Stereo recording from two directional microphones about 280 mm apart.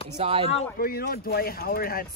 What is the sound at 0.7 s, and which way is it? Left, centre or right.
Speech, left.